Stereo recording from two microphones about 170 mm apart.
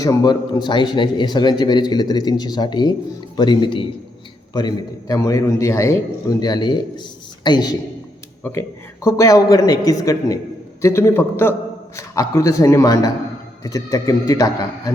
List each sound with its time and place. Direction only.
0.0 s a man's voice: 20° left (ahead or behind)
9.0 s a man's voice: 20° left (ahead or behind)